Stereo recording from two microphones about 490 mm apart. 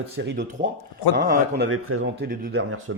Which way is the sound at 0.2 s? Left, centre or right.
Centre.